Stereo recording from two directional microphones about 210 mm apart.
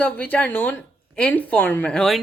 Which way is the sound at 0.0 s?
5° left (ahead or behind).